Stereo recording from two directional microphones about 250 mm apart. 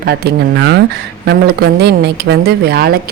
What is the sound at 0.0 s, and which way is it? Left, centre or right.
Speech, right.